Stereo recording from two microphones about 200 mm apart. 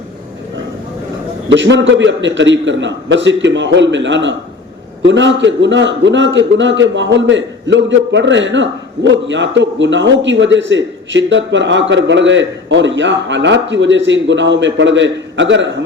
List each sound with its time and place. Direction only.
1.5 s a man's voice: 65° right (ahead or behind)